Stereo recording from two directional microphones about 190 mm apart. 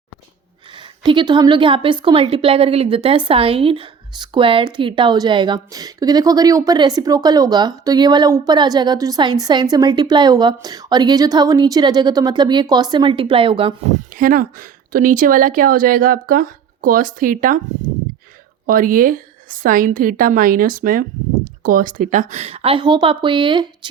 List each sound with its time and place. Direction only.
0.8 s a woman's voice: 25° right (ahead or behind)
13.9 s speech: 45° right (ahead or behind)
18.6 s a woman's voice: 45° right (ahead or behind); by 23.9 s 25° right (ahead or behind)